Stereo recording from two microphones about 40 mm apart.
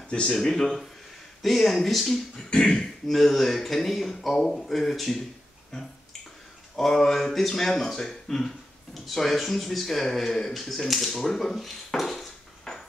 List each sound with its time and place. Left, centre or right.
0.1 s speech: left
0.4 s beatboxing: centre
1.4 s speech: centre
2.3 s beatboxing: centre
3.1 s speech: centre
6.8 s speech: centre
12.7 s a sound: centre